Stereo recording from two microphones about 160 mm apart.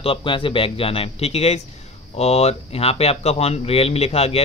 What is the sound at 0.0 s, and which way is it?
A man's voice, 35° left (ahead or behind).